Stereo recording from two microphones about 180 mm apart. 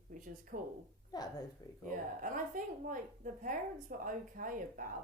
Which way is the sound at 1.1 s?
20° left (ahead or behind).